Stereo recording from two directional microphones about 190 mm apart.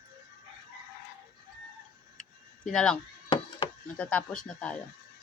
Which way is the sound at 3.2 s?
25° left (ahead or behind).